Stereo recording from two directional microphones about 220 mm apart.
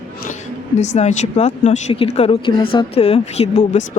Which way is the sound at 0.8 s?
30° left (ahead or behind).